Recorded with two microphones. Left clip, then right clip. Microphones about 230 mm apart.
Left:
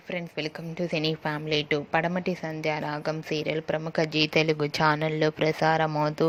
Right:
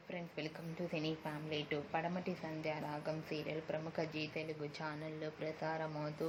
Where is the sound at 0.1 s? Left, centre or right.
Left.